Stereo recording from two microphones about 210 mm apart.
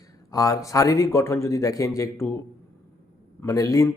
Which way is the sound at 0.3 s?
15° left (ahead or behind).